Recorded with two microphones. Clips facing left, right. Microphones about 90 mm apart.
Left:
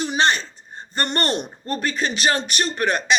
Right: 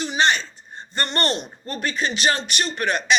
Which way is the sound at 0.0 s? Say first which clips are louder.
Left 1 dB; 40° left (ahead or behind).